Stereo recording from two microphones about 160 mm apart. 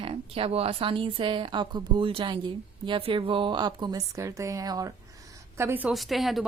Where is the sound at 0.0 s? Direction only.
35° right (ahead or behind); by 5.9 s 15° right (ahead or behind).